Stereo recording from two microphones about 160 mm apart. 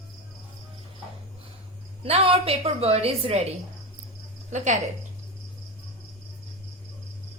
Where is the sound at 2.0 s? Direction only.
35° right (ahead or behind).